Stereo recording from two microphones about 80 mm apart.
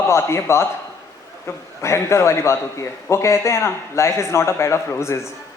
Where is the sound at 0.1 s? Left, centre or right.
Left.